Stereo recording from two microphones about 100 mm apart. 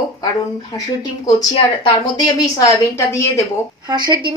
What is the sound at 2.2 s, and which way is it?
A woman's voice, 40° left (ahead or behind).